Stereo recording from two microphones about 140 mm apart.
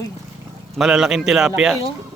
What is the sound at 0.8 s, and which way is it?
Speech, 5° right (ahead or behind).